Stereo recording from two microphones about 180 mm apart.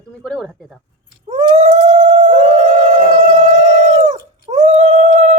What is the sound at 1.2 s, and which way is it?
Howl, 40° right (ahead or behind).